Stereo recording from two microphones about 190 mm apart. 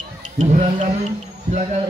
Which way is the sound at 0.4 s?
40° right (ahead or behind).